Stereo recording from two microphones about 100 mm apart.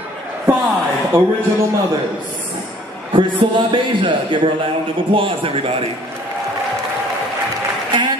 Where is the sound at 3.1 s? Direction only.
60° right (ahead or behind).